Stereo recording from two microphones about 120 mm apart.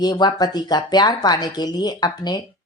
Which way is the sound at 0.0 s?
35° left (ahead or behind).